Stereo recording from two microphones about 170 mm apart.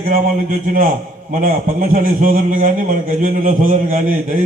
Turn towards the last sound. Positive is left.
turn(degrees=-50)  # may be behind; listen again after turning